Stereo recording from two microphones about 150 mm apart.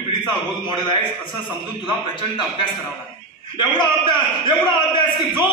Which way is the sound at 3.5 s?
30° left (ahead or behind).